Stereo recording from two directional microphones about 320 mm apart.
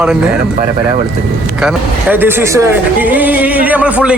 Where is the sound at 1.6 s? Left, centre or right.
Centre.